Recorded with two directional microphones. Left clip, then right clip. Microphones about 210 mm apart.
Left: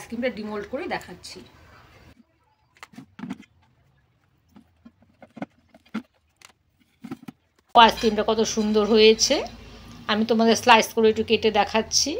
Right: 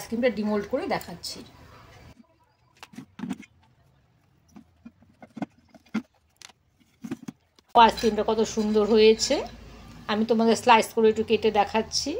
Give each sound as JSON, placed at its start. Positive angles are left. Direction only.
{"t": 0.5, "sound": "speech", "side_deg": -35}
{"t": 2.9, "sound": "a sound", "side_deg": 15}
{"t": 5.2, "sound": "horse", "side_deg": 5}
{"t": 7.7, "sound": "a woman's voice", "side_deg": 0}